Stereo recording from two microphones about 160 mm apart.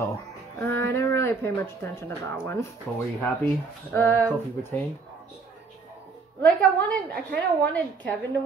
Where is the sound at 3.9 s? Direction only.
10° left (ahead or behind).